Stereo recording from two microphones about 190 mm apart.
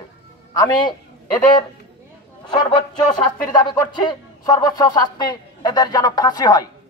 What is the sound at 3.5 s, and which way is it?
Speech, 20° left (ahead or behind).